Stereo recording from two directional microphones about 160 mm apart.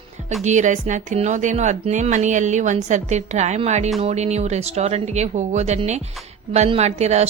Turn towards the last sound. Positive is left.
turn(degrees=-45)  # may be behind; listen again after turning